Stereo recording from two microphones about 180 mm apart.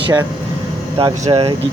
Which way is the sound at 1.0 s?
30° right (ahead or behind).